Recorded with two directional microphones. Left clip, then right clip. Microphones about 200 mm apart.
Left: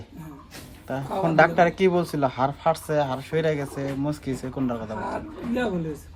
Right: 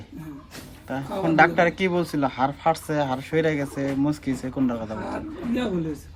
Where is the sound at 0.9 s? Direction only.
25° left (ahead or behind).